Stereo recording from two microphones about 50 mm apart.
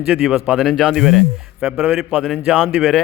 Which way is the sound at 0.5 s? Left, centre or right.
Centre.